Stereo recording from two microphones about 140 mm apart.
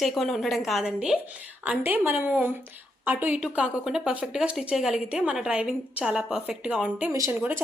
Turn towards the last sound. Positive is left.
turn(degrees=-15)  # may be behind; listen again after turning